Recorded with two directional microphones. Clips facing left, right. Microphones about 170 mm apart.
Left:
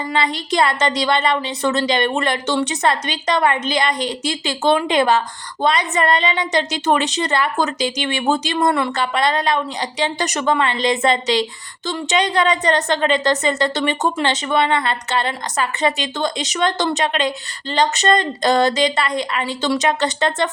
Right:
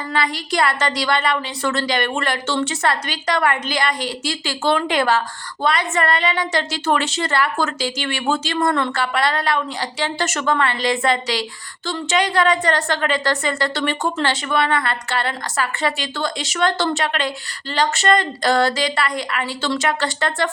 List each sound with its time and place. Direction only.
0.1 s a woman's voice: 20° left (ahead or behind)